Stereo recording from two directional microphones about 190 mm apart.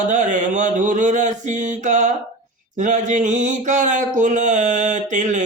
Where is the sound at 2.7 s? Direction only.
40° right (ahead or behind).